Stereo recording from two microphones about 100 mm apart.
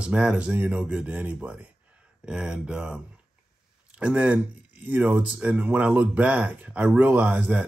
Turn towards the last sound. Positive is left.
turn(degrees=-15)  # may be behind; listen again after turning